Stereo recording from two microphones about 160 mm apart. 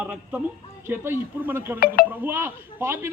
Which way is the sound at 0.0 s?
10° right (ahead or behind).